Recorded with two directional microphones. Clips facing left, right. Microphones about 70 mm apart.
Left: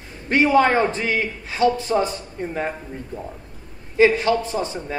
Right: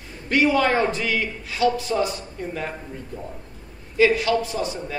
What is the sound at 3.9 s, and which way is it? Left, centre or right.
A man's voice, left.